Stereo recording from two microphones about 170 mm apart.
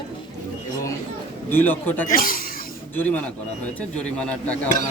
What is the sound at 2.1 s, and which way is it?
Speech, 55° left (ahead or behind).